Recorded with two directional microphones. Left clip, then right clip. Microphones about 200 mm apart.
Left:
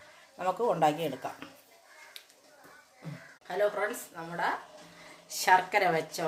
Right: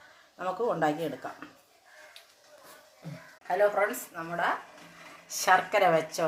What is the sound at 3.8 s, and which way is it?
Speech, 5° left (ahead or behind).